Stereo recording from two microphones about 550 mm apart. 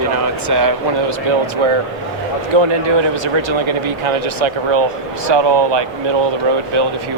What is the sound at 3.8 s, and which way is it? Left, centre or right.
Speech, right.